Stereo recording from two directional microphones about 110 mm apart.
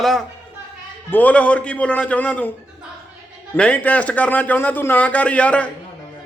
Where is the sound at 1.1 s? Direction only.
15° left (ahead or behind).